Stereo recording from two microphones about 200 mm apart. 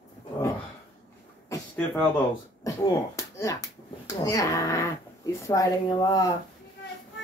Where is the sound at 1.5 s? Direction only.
10° left (ahead or behind).